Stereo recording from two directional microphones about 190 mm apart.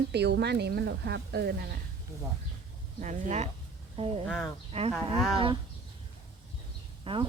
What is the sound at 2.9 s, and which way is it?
Speech, 40° right (ahead or behind).